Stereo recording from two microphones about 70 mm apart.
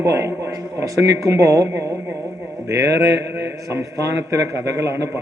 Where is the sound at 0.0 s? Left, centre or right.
Right.